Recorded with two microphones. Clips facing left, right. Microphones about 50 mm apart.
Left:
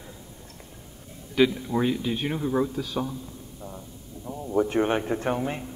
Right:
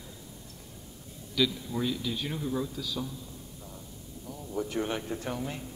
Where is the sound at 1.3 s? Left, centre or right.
Left.